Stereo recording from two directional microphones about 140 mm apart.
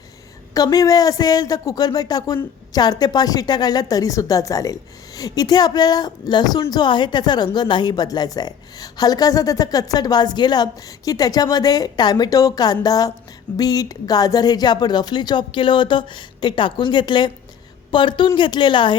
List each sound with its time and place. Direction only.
0.5 s speech: 25° left (ahead or behind)